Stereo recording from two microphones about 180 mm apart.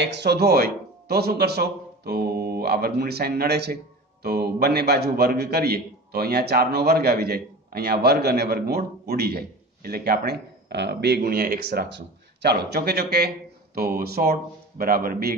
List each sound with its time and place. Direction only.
0.0 s a man's voice: 70° right (ahead or behind); by 15.3 s 55° right (ahead or behind)